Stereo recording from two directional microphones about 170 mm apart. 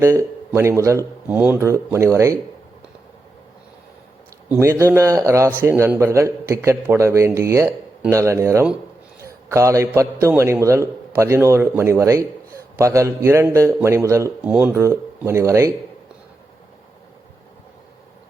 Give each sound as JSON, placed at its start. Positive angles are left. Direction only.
{"t": 0.0, "sound": "a man's voice", "side_deg": -15}
{"t": 4.4, "sound": "a man's voice", "side_deg": -15}